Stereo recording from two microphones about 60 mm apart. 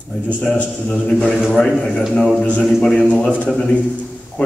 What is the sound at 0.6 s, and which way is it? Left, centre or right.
Speech, left.